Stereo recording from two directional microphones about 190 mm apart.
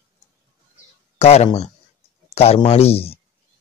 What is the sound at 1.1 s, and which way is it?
Speech, 35° left (ahead or behind).